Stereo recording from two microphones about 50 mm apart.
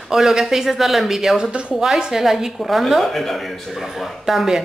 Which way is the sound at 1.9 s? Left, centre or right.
Centre.